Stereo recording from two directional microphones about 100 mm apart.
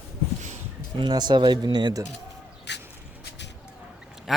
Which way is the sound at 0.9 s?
45° right (ahead or behind).